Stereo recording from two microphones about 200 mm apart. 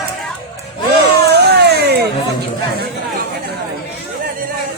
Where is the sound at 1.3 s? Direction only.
55° right (ahead or behind).